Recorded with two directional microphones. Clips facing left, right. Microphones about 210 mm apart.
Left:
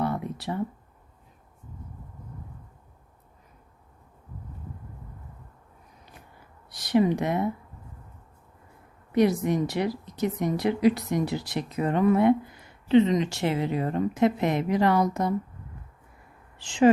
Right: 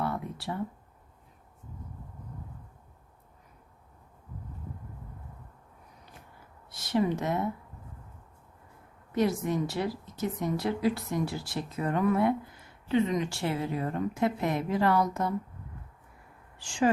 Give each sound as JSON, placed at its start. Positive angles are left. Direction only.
{"t": 0.0, "sound": "a sound", "side_deg": 20}
{"t": 6.7, "sound": "a woman's voice", "side_deg": 15}
{"t": 9.1, "sound": "a woman's voice", "side_deg": 15}
{"t": 16.6, "sound": "a woman's voice", "side_deg": 20}